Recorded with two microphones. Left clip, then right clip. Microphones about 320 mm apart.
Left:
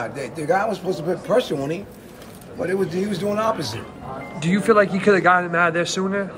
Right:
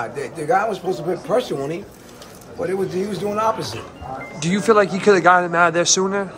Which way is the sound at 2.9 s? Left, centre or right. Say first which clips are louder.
Right 1 dB; centre.